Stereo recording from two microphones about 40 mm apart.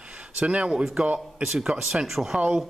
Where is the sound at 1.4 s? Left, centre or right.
Centre.